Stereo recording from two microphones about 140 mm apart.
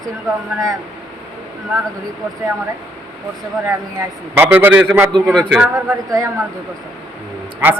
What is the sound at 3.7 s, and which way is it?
A man's voice, 15° right (ahead or behind).